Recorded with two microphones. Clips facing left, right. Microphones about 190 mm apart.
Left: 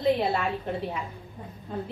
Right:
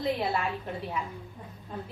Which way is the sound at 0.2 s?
30° left (ahead or behind).